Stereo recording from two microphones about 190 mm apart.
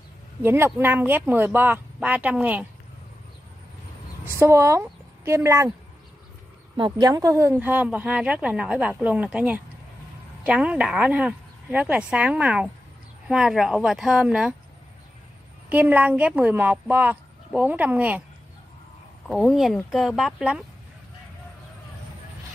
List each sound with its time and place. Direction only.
0.4 s a woman's voice: 10° right (ahead or behind)
4.2 s speech: 15° right (ahead or behind)
6.8 s a woman's voice: 20° right (ahead or behind); by 14.5 s 5° right (ahead or behind)
15.7 s a woman's voice: 10° right (ahead or behind)
19.2 s speech: centre (ahead or behind)